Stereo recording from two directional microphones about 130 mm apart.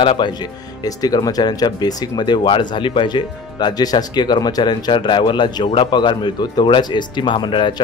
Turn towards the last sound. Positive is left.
turn(degrees=40)  # may be behind; listen again after turning